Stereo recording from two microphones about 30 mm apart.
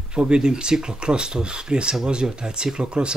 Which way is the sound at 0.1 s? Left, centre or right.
Right.